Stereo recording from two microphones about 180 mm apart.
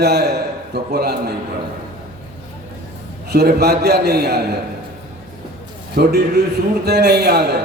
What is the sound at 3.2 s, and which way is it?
A man's voice, 65° right (ahead or behind).